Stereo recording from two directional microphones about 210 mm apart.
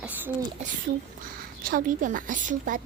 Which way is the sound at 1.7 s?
40° right (ahead or behind).